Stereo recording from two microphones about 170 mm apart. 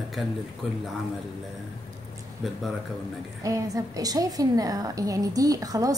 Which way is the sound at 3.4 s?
20° right (ahead or behind).